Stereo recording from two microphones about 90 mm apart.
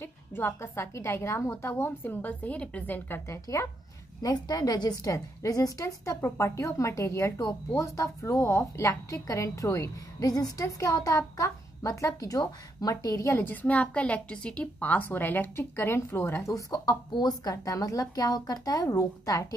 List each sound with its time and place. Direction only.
0.0 s a woman's voice: 25° left (ahead or behind)
3.1 s a woman's voice: 35° left (ahead or behind)
4.2 s a woman's voice: 45° left (ahead or behind)
17.1 s a woman's voice: 50° left (ahead or behind)